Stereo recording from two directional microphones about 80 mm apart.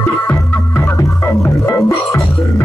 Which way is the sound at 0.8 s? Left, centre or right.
Left.